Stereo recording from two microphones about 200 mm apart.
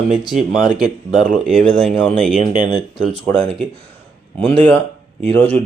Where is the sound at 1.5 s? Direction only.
Centre (ahead or behind).